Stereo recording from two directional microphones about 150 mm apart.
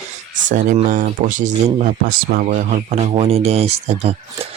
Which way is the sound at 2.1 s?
70° right (ahead or behind).